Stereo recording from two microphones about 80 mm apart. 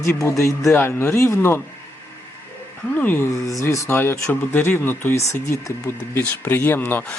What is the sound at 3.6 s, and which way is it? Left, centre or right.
Speech, left.